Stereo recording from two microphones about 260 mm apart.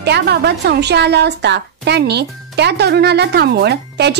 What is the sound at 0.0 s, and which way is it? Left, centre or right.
A woman's voice, right.